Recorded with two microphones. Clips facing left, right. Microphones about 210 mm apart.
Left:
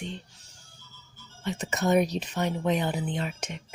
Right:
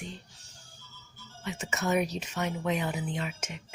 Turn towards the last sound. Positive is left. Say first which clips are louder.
# left 3 dB
turn(degrees=35)  # may be behind; listen again after turning